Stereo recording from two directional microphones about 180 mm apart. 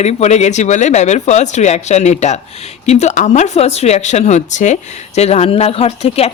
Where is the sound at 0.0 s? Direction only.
35° left (ahead or behind).